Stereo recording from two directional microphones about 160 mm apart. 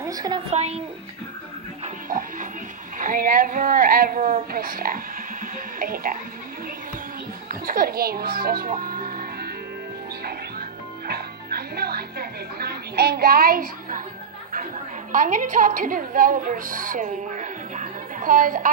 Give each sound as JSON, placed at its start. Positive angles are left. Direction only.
{"t": 0.0, "sound": "a woman's voice", "side_deg": -20}
{"t": 0.5, "sound": "speech", "side_deg": -40}
{"t": 2.0, "sound": "music", "side_deg": -60}
{"t": 3.0, "sound": "a woman's voice", "side_deg": -60}
{"t": 7.4, "sound": "music", "side_deg": -60}
{"t": 11.1, "sound": "music", "side_deg": -75}
{"t": 15.1, "sound": "a woman's voice", "side_deg": -55}